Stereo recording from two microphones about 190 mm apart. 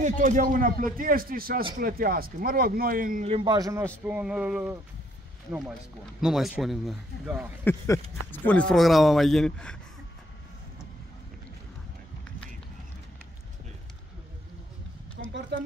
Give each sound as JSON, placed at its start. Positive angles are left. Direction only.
{"t": 0.0, "sound": "a man's voice", "side_deg": -40}
{"t": 3.3, "sound": "a man's voice", "side_deg": -25}
{"t": 4.0, "sound": "a sound", "side_deg": -5}
{"t": 6.2, "sound": "speech", "side_deg": -5}
{"t": 7.6, "sound": "speech", "side_deg": 10}
{"t": 15.2, "sound": "a sound", "side_deg": -60}